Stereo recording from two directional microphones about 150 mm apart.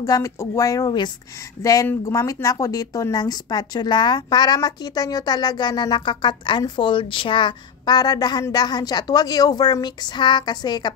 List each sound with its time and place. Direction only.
0.0 s a woman's voice: 20° left (ahead or behind)